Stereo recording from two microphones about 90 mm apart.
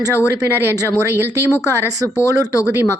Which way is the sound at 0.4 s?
25° right (ahead or behind).